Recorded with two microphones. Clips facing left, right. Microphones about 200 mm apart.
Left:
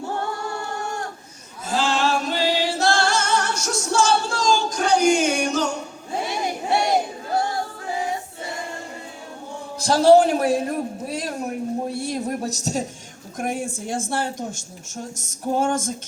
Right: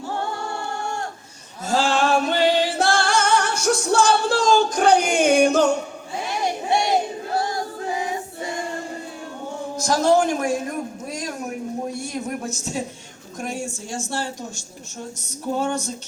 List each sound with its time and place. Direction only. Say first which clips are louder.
1.7 s singing: right 2 dB; 55° right (ahead or behind)
9.7 s a sound: left 4 dB; 30° left (ahead or behind)
13.4 s speech: left 3 dB; 55° left (ahead or behind)